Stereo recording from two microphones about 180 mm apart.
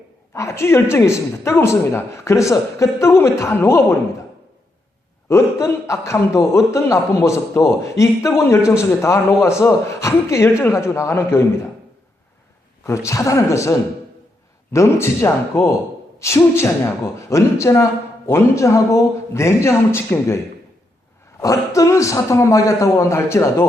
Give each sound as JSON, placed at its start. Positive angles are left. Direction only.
{"t": 0.3, "sound": "a man's voice", "side_deg": 15}
{"t": 5.3, "sound": "a man's voice", "side_deg": 15}
{"t": 13.1, "sound": "a man's voice", "side_deg": 15}
{"t": 21.4, "sound": "a man's voice", "side_deg": 15}